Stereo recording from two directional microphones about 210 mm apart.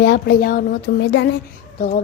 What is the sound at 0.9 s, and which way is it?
Speech, 55° left (ahead or behind).